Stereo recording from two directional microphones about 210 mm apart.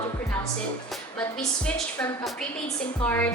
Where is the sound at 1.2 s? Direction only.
5° left (ahead or behind).